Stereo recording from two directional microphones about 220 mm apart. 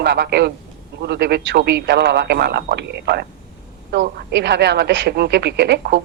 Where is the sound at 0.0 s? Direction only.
50° right (ahead or behind).